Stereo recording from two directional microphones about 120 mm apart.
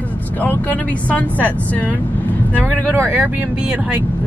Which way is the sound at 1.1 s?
15° left (ahead or behind).